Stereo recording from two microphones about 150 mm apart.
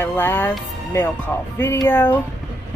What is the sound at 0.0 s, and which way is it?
Speech, 15° left (ahead or behind).